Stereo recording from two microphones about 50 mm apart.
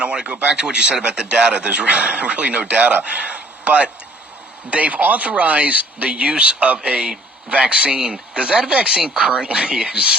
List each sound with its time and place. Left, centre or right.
0.0 s speech: right